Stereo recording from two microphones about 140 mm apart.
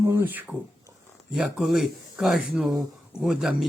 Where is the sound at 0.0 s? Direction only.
20° right (ahead or behind).